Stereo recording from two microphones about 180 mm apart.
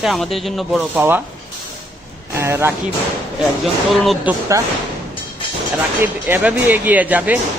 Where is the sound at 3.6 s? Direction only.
Centre (ahead or behind).